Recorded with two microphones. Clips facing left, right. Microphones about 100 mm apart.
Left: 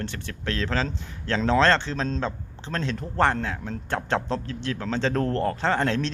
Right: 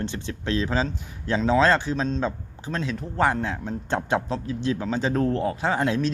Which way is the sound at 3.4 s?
20° right (ahead or behind).